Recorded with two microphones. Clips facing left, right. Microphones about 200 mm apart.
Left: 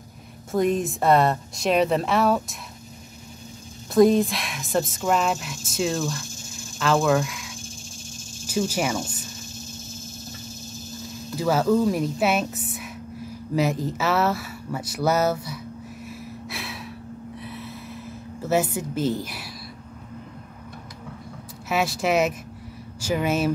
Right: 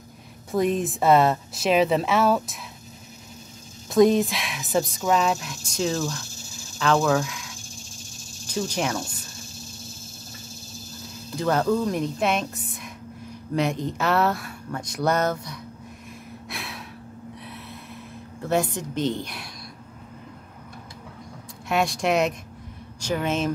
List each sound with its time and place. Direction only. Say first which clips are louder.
0.5 s speech: left 1 dB; centre (ahead or behind)
3.9 s speech: left 1 dB; centre (ahead or behind)
11.3 s speech: left 2 dB; 5° left (ahead or behind)
16.1 s gasp: left 1 dB; centre (ahead or behind)
17.4 s vehicle: left 4 dB; centre (ahead or behind)
18.4 s speech: left 1 dB; 5° left (ahead or behind)
21.6 s speech: even; 5° left (ahead or behind)